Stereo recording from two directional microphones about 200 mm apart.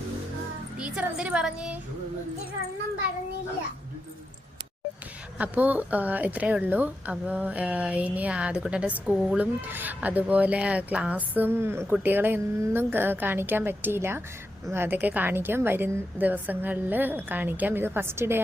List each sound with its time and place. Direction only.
0.8 s speech: 5° right (ahead or behind)
5.4 s a woman's voice: 10° right (ahead or behind)